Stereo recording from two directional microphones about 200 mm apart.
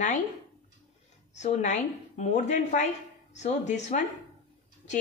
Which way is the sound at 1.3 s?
35° left (ahead or behind).